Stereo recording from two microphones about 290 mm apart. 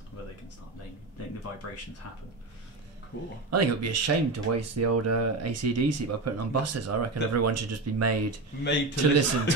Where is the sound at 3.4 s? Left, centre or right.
Right.